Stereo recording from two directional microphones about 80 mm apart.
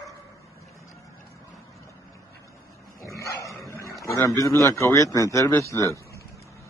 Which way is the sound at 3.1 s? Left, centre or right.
Left.